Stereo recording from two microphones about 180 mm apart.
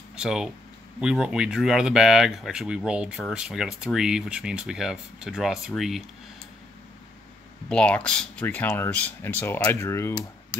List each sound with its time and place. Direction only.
0.1 s speech: 5° right (ahead or behind)
7.7 s speech: 5° left (ahead or behind)